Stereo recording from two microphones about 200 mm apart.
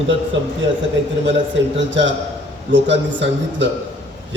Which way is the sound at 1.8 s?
65° right (ahead or behind).